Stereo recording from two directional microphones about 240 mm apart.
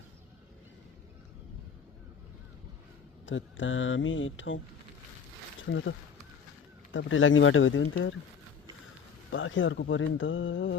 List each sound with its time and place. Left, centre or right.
3.2 s speech: left
6.9 s speech: left
9.3 s speech: left